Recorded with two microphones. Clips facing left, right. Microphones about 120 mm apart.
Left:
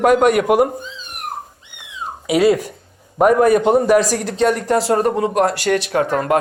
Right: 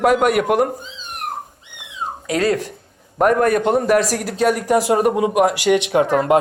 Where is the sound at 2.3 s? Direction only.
10° left (ahead or behind); by 6.4 s 20° right (ahead or behind).